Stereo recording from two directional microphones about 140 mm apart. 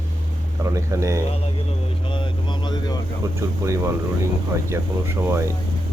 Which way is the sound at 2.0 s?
35° left (ahead or behind).